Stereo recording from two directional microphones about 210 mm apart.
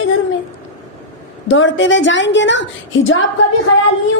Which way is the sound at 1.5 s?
60° left (ahead or behind).